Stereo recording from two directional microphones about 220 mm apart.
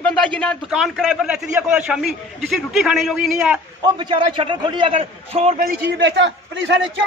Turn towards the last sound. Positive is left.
turn(degrees=-55)  # may be behind; listen again after turning